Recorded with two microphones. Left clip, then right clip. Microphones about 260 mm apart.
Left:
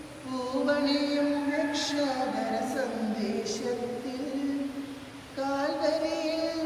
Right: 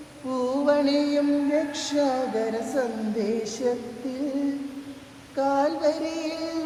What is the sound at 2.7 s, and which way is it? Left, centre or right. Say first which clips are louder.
Speech: right 5 dB; centre.